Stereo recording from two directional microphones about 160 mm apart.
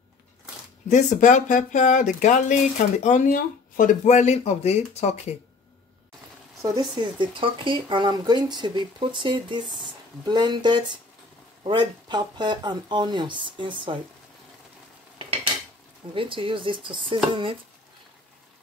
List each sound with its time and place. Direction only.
0.8 s speech: 50° left (ahead or behind)
6.6 s speech: 20° right (ahead or behind)
16.2 s speech: 30° right (ahead or behind)